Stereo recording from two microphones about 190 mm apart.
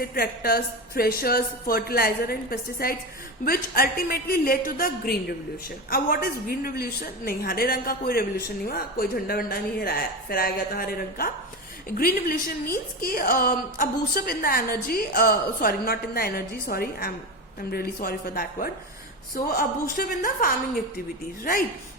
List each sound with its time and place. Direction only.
0.0 s a woman's voice: 50° left (ahead or behind)